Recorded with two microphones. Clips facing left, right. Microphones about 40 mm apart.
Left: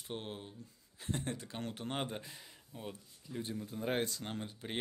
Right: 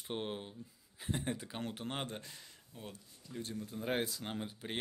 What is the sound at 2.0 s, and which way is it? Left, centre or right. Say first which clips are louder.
Speech: left 2 dB; centre.